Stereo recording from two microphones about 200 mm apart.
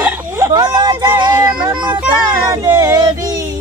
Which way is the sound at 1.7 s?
20° right (ahead or behind).